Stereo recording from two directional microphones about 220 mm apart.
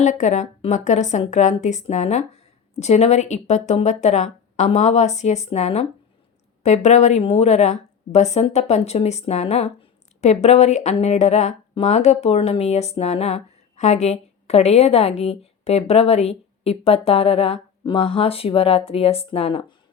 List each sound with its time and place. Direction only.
0.0 s a woman's voice: 35° left (ahead or behind)